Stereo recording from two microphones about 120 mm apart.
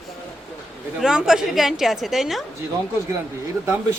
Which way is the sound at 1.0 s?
5° right (ahead or behind).